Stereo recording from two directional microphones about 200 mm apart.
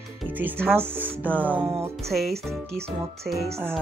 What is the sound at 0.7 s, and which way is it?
Speech, 10° right (ahead or behind).